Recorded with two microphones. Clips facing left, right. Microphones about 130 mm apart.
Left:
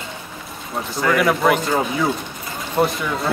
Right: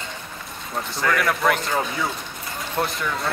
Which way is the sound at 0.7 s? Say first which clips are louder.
Left 4 dB; centre (ahead or behind).